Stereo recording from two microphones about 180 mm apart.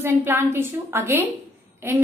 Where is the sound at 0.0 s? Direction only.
10° right (ahead or behind).